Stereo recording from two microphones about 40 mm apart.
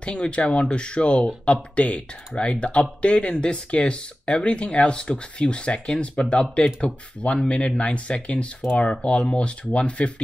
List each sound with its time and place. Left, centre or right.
0.0 s speech: left